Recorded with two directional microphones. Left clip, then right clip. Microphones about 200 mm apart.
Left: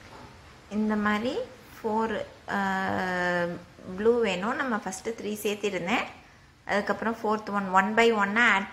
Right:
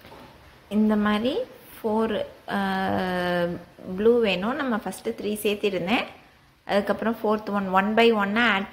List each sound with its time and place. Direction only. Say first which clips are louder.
0.7 s a woman's voice: right 4 dB; 20° right (ahead or behind)